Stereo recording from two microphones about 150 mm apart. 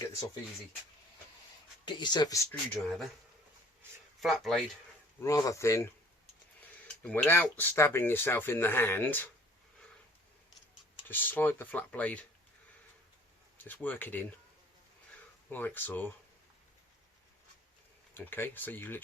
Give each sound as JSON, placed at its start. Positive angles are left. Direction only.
{"t": 1.8, "sound": "speech", "side_deg": 30}
{"t": 2.7, "sound": "speech", "side_deg": 0}
{"t": 4.2, "sound": "speech", "side_deg": 0}
{"t": 5.2, "sound": "speech", "side_deg": 20}
{"t": 11.1, "sound": "speech", "side_deg": 10}
{"t": 13.6, "sound": "speech", "side_deg": 15}
{"t": 15.4, "sound": "speech", "side_deg": 15}
{"t": 18.1, "sound": "speech", "side_deg": 15}